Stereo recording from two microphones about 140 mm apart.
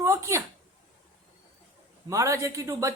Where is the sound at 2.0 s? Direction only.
20° right (ahead or behind).